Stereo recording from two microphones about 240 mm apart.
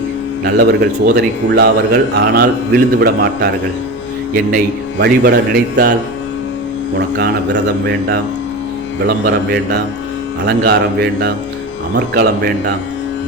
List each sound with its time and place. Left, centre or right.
0.4 s speech: right
7.2 s a man's voice: right